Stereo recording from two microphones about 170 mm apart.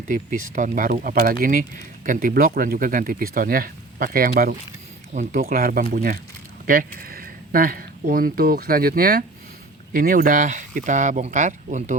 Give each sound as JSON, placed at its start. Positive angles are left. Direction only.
{"t": 0.1, "sound": "speech", "side_deg": -50}